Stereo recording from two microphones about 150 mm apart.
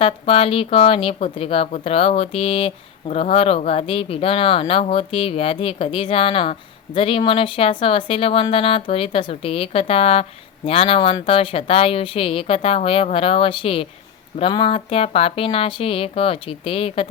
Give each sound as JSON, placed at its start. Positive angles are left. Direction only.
{"t": 0.0, "sound": "a woman's voice", "side_deg": 40}